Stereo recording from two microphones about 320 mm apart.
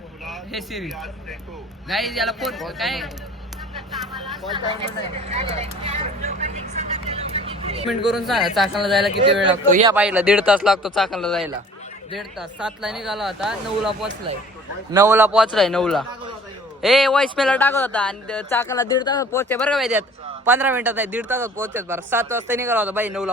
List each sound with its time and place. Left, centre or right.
0.3 s speech: centre
3.9 s vehicle: centre
4.5 s speech: centre
5.3 s vehicle: centre
7.9 s speech: centre
9.5 s speech: centre
9.9 s speech: centre